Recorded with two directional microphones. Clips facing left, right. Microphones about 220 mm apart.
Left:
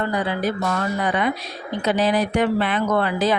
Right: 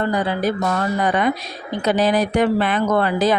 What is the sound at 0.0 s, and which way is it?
A woman's voice, 40° right (ahead or behind).